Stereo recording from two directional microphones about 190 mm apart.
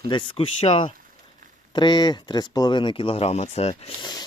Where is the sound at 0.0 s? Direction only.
25° left (ahead or behind).